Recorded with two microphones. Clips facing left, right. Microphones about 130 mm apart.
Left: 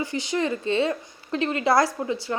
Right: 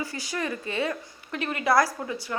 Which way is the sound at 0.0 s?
25° left (ahead or behind).